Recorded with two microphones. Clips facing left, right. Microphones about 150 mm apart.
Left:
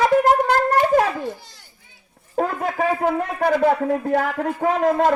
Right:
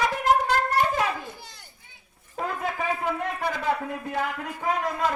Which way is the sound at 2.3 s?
45° left (ahead or behind).